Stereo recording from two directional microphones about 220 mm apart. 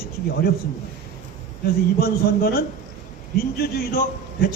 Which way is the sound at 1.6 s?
45° left (ahead or behind).